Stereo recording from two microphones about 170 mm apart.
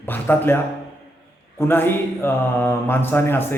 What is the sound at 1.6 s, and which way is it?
Speech, 10° left (ahead or behind).